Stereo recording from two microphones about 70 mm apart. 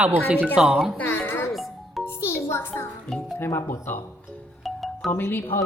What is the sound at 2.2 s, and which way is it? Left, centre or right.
Speech, left.